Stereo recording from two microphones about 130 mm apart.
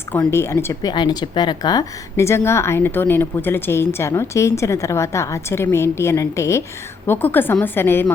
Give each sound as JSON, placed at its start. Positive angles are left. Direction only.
{"t": 0.3, "sound": "a woman's voice", "side_deg": 20}